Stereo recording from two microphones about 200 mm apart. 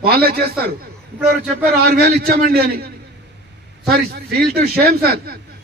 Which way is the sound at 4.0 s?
50° right (ahead or behind).